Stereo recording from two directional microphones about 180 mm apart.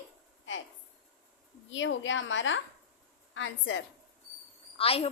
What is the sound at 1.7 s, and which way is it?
A woman's voice, 90° left.